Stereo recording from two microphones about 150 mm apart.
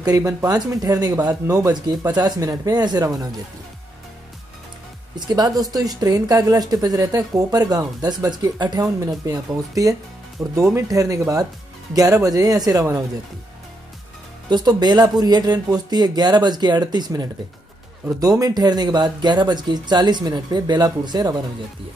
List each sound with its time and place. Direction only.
0.0 s speech: 25° right (ahead or behind)
5.1 s speech: 25° right (ahead or behind)
14.5 s speech: 30° right (ahead or behind)